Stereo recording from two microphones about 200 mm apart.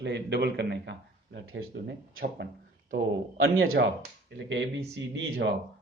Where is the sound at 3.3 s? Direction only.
80° right.